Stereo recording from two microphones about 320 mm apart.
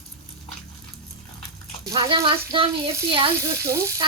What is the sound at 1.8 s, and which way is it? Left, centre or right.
Speech, centre.